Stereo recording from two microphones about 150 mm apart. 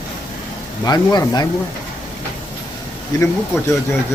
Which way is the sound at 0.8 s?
25° left (ahead or behind).